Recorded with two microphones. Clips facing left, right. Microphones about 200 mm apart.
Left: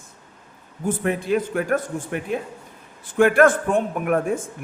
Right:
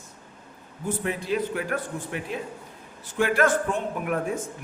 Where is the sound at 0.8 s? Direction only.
55° left (ahead or behind).